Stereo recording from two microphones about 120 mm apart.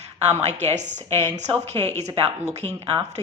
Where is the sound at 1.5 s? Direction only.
55° right (ahead or behind).